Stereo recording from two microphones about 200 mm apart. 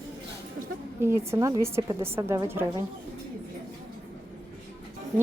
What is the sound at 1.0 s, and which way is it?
A woman's voice, 15° right (ahead or behind).